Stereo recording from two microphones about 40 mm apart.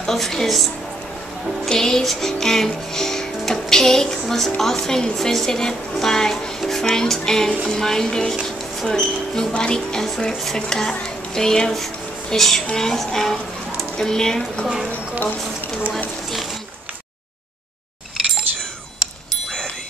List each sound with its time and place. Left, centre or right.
0.0 s a woman's voice: centre
1.7 s speech: centre
2.0 s music: centre
4.6 s speech: centre